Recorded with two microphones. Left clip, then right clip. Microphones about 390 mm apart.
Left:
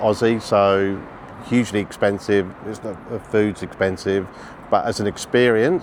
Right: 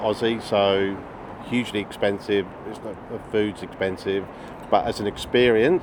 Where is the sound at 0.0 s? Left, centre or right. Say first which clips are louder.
Left 5 dB; left.